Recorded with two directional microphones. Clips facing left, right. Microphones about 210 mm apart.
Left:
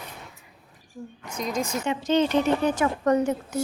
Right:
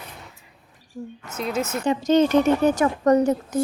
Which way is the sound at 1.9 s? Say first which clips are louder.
Right 5 dB; 40° right (ahead or behind).